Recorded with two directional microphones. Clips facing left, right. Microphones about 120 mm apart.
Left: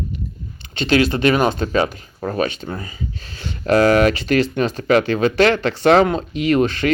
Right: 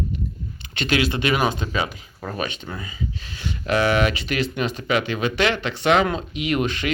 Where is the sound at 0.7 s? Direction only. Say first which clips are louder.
Left 5 dB; 35° left (ahead or behind).